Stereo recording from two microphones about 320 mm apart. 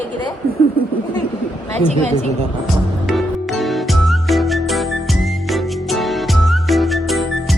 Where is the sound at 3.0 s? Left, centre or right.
Centre.